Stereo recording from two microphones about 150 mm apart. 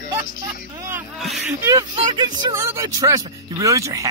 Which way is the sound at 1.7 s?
25° right (ahead or behind).